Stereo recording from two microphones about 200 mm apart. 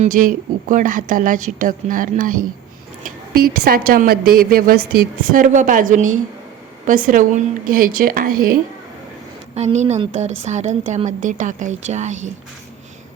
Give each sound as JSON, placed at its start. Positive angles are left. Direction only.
{"t": 0.0, "sound": "a woman's voice", "side_deg": -40}
{"t": 9.6, "sound": "a woman's voice", "side_deg": -30}